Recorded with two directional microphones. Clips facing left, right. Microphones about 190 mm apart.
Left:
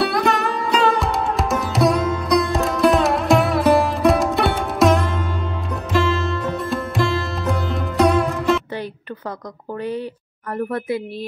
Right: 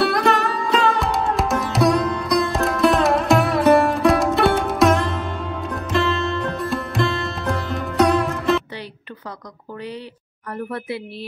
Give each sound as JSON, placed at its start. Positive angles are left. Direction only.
{"t": 0.0, "sound": "music", "side_deg": 0}